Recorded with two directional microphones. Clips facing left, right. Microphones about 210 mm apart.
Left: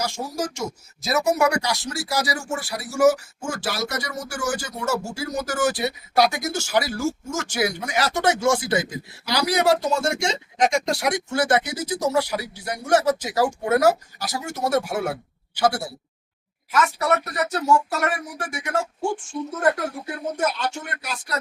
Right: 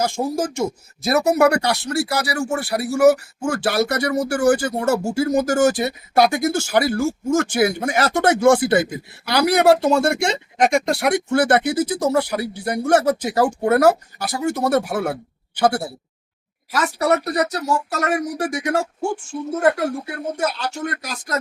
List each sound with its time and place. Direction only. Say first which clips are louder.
0.0 s speech: right 6 dB; 55° right (ahead or behind)
16.7 s speech: right 2 dB; 35° right (ahead or behind)
20.4 s speech: right 2 dB; 35° right (ahead or behind)